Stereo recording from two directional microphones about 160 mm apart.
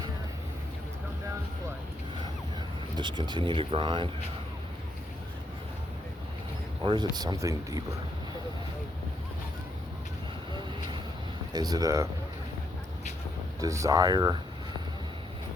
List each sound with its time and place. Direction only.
2.9 s speech: 30° right (ahead or behind)
6.8 s speech: 30° right (ahead or behind)
10.5 s vehicle: 30° right (ahead or behind)
11.5 s speech: 25° right (ahead or behind)
13.6 s speech: 20° right (ahead or behind)